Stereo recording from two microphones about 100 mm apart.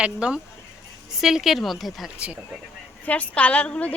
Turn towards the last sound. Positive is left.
turn(degrees=10)  # may be behind; listen again after turning